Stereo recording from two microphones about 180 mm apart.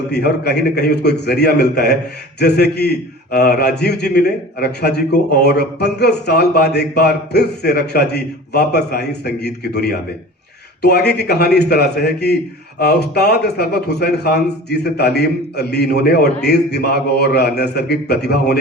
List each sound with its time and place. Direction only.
0.1 s a man's voice: 65° left (ahead or behind)